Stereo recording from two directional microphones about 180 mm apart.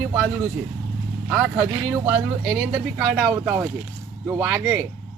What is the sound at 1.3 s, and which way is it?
Speech, 5° right (ahead or behind).